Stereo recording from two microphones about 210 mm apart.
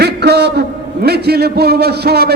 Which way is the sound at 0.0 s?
50° right (ahead or behind).